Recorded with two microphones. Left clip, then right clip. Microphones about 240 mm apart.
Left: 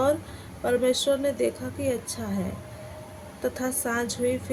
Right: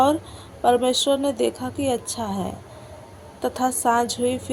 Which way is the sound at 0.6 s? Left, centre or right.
Centre.